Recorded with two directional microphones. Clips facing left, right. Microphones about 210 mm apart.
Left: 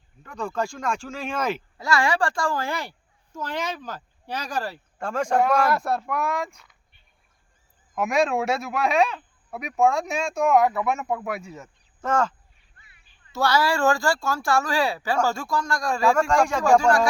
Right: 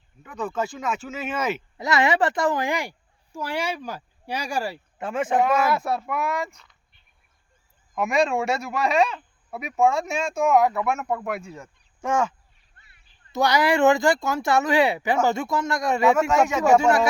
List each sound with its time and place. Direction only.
0.2 s a man's voice: 5° right (ahead or behind)
1.8 s a man's voice: 20° right (ahead or behind); by 6.6 s centre (ahead or behind)
7.9 s a man's voice: centre (ahead or behind)
11.9 s speech: 10° right (ahead or behind)
13.3 s speech: 20° right (ahead or behind)
16.3 s a man's voice: 5° right (ahead or behind)
16.8 s speech: 25° right (ahead or behind)